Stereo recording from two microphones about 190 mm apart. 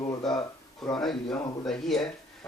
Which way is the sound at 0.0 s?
20° left (ahead or behind).